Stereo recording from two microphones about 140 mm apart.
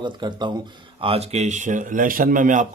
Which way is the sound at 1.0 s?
45° right (ahead or behind).